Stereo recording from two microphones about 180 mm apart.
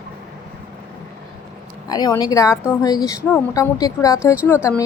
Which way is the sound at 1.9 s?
20° left (ahead or behind).